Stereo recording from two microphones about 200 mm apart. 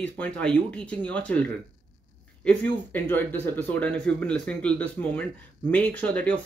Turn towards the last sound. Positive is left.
turn(degrees=5)  # may be behind; listen again after turning